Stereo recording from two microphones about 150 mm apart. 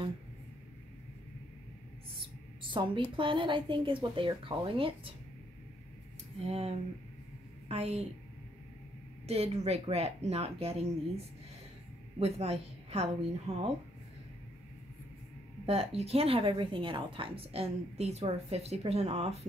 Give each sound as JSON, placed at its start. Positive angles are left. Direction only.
{"t": 2.7, "sound": "a woman's voice", "side_deg": -35}
{"t": 6.4, "sound": "a woman's voice", "side_deg": -40}
{"t": 9.2, "sound": "a woman's voice", "side_deg": -45}
{"t": 15.6, "sound": "a woman's voice", "side_deg": -45}